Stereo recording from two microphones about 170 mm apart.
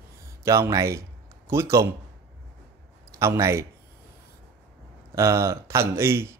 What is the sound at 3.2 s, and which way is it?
Speech, 15° right (ahead or behind).